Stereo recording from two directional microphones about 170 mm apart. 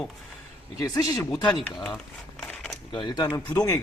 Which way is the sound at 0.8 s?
20° left (ahead or behind).